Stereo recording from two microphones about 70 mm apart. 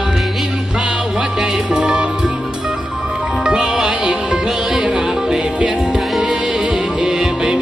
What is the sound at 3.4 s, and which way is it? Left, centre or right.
Music, centre.